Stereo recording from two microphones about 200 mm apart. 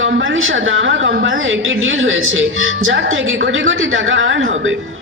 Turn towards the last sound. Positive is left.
turn(degrees=-70)  # may be behind; listen again after turning